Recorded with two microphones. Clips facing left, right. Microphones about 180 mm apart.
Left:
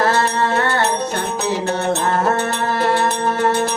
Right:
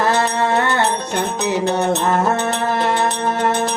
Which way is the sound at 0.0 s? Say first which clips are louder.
Even; 15° right (ahead or behind).